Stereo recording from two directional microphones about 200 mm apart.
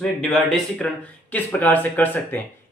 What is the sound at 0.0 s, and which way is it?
Speech, centre (ahead or behind).